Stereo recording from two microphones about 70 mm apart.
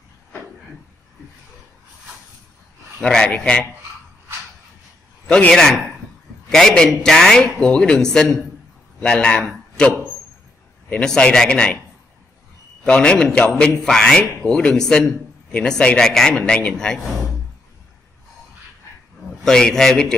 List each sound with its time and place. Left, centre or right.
3.0 s speech: centre
3.3 s speech: centre
5.5 s speech: centre
12.8 s speech: centre
19.4 s speech: centre